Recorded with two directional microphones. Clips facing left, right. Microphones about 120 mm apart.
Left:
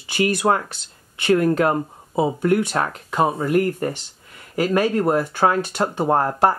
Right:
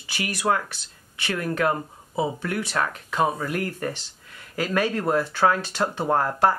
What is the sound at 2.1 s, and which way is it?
Speech, 20° left (ahead or behind).